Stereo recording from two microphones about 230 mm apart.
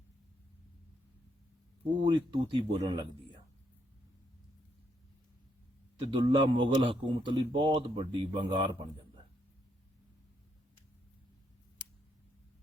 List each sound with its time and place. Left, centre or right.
2.0 s a man's voice: right
6.1 s a man's voice: right